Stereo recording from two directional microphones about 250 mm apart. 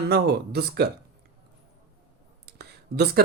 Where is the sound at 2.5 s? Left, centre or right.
Right.